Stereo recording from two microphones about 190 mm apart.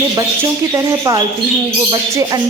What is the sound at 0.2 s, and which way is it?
Speech, 15° right (ahead or behind).